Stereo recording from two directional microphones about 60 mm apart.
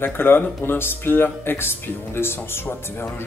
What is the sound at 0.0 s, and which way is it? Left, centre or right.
Speech, left.